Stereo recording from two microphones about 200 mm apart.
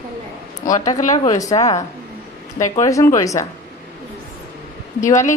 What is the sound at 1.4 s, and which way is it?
Speech, 15° left (ahead or behind).